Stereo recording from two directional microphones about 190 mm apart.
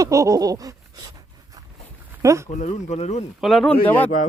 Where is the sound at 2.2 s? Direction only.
15° right (ahead or behind).